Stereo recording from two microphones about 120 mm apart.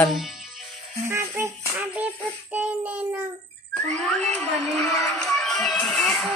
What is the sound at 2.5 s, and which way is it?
Child singing, 15° right (ahead or behind).